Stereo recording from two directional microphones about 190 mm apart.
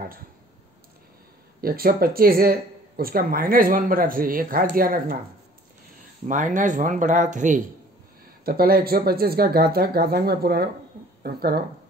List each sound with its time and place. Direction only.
1.6 s speech: 50° right (ahead or behind)
6.2 s speech: 40° right (ahead or behind)
8.5 s speech: 50° right (ahead or behind)